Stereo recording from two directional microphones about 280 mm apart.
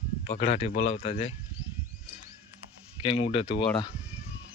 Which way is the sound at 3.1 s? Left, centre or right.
Centre.